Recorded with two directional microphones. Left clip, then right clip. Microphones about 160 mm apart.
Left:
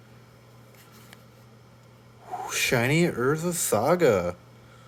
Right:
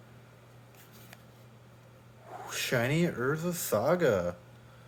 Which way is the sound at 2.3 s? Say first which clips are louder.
Left 7 dB; 40° left (ahead or behind).